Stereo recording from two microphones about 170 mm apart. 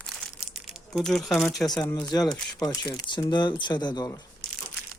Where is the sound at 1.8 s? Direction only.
20° left (ahead or behind).